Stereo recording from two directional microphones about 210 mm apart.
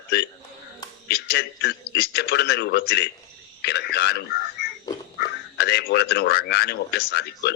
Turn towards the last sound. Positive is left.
turn(degrees=50)  # may be behind; listen again after turning